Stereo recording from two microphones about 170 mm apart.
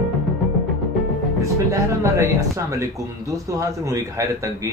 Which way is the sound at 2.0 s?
20° right (ahead or behind).